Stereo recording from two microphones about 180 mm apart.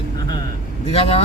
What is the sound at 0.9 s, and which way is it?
Speech, 35° left (ahead or behind).